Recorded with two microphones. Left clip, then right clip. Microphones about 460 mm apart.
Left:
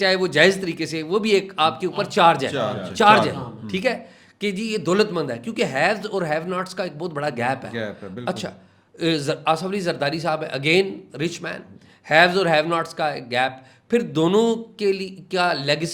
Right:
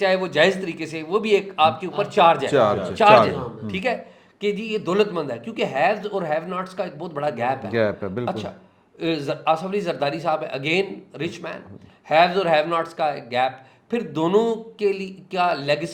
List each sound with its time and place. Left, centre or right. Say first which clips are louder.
0.0 s a man's voice: left 1 dB; left
2.5 s speech: right 7 dB; centre
2.9 s a man's voice: even; left
7.7 s speech: right 8 dB; centre
8.2 s a man's voice: right 1 dB; left